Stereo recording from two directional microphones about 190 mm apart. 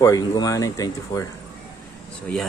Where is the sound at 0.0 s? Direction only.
20° left (ahead or behind).